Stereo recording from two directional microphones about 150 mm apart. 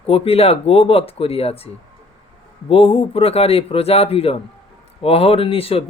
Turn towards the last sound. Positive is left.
turn(degrees=40)  # may be behind; listen again after turning